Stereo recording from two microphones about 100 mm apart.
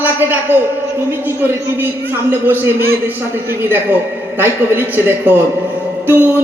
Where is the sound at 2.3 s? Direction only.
20° right (ahead or behind).